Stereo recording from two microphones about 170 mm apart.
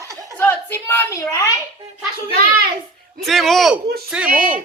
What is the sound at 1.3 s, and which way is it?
Speech, 20° left (ahead or behind).